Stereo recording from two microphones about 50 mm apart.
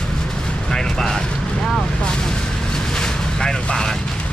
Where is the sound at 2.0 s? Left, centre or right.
Centre.